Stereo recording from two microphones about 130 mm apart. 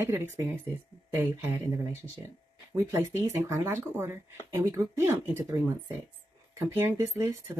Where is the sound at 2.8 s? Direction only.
25° right (ahead or behind).